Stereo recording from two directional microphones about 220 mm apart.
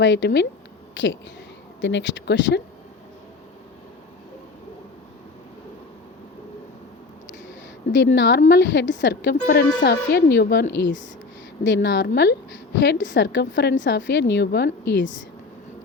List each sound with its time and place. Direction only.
0.0 s speech: 55° left (ahead or behind)
7.9 s a woman's voice: 55° left (ahead or behind)